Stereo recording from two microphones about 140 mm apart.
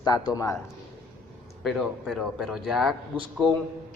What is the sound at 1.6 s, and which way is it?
A man's voice, centre (ahead or behind).